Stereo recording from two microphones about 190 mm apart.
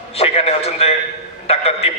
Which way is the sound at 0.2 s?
30° left (ahead or behind).